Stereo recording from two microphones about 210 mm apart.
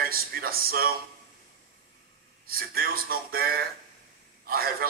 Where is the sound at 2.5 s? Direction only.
45° right (ahead or behind).